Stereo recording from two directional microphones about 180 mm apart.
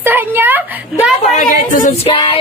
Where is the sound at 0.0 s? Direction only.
10° right (ahead or behind).